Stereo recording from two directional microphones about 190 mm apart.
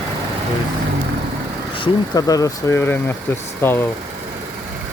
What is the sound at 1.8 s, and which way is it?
Speech, 20° left (ahead or behind).